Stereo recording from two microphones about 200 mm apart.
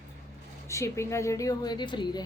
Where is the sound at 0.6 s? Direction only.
15° left (ahead or behind).